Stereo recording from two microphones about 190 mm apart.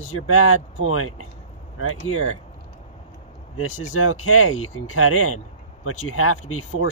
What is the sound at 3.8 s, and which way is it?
Speech, 90° left.